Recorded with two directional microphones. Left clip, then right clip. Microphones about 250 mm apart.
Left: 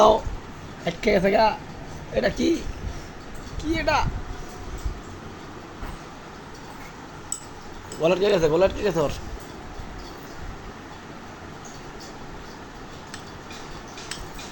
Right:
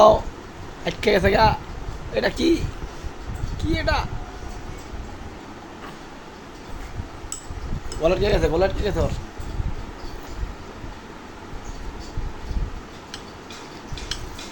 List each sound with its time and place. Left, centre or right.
0.9 s speech: right
3.6 s speech: centre
8.0 s speech: centre